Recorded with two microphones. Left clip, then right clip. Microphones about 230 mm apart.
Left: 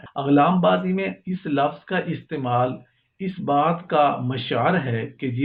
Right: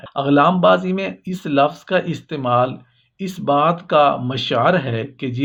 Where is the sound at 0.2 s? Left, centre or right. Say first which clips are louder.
Right 4 dB; right.